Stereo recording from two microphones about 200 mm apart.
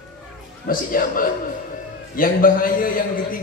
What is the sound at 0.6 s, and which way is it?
Mantra, 45° left (ahead or behind).